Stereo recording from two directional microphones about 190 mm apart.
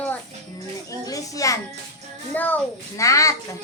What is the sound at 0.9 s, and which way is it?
Speech, 20° left (ahead or behind).